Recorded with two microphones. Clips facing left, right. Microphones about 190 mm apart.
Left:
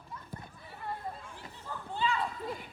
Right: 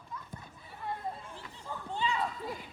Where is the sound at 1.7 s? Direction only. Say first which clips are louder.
Left 1 dB; 15° right (ahead or behind).